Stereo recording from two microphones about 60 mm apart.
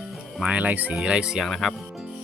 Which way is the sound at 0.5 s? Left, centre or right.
Right.